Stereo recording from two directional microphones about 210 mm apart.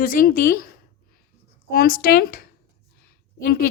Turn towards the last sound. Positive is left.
turn(degrees=45)  # may be behind; listen again after turning